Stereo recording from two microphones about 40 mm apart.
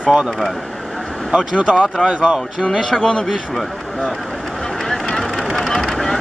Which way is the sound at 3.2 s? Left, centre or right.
Centre.